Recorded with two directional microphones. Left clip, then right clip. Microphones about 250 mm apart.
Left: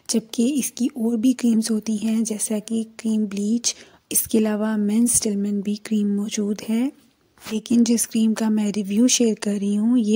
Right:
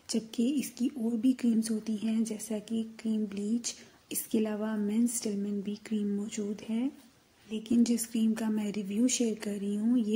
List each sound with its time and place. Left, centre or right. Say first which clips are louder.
0.1 s speech: left 9 dB; left